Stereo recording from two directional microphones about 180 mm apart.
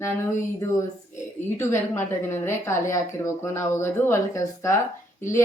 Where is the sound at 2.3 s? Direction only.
15° left (ahead or behind).